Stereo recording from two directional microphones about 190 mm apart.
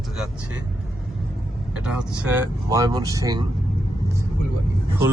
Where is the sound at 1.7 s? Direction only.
5° right (ahead or behind).